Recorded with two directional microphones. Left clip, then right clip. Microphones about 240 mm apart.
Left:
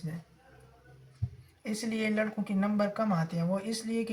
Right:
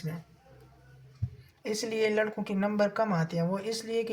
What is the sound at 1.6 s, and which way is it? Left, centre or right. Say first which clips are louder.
Speech: right 5 dB; right.